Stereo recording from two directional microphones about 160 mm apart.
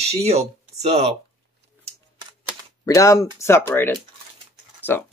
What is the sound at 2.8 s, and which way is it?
Speech, 20° left (ahead or behind).